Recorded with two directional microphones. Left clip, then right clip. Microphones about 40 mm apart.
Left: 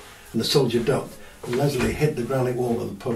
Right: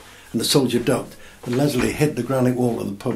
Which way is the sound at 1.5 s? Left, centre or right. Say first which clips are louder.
Right 3 dB; right.